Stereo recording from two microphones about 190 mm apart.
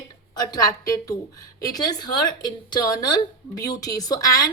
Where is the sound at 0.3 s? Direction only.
20° left (ahead or behind).